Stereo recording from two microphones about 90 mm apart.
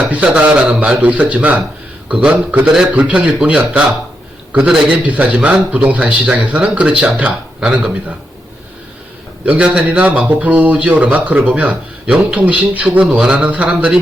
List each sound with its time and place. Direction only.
0.1 s speech: 15° right (ahead or behind)
9.5 s speech: 15° right (ahead or behind)